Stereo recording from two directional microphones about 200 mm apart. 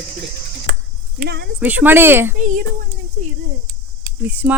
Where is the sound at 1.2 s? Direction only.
55° right (ahead or behind).